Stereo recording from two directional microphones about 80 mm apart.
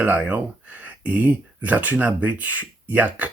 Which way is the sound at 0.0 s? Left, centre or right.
Centre.